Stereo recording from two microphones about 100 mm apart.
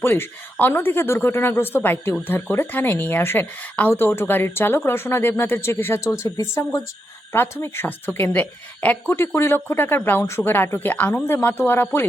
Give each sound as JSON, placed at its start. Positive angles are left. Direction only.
{"t": 0.0, "sound": "speech", "side_deg": 25}